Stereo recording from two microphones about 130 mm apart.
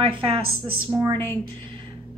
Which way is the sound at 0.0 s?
45° right (ahead or behind).